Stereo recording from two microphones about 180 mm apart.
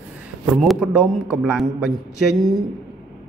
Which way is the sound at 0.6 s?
Centre (ahead or behind).